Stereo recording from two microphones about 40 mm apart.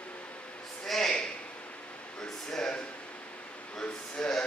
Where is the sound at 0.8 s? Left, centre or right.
Centre.